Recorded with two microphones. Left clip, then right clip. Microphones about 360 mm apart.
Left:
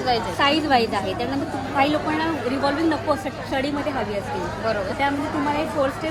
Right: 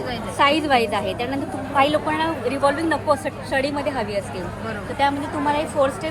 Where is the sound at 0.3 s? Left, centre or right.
Centre.